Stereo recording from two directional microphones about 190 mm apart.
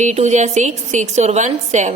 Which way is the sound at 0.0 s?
40° right (ahead or behind).